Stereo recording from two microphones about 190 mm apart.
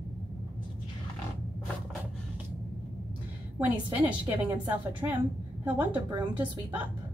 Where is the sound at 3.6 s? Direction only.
10° right (ahead or behind).